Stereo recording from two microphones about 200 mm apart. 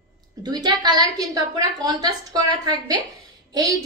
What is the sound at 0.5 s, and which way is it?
A woman's voice, 20° right (ahead or behind).